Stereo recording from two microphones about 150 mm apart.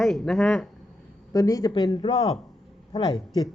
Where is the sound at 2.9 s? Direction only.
35° left (ahead or behind).